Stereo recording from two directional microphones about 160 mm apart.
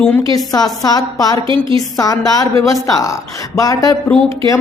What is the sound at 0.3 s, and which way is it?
A woman's voice, 20° left (ahead or behind).